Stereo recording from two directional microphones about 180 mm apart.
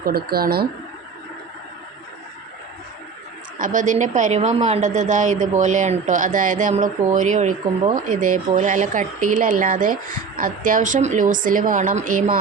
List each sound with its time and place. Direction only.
0.0 s speech: 55° right (ahead or behind)
3.6 s speech: 45° right (ahead or behind)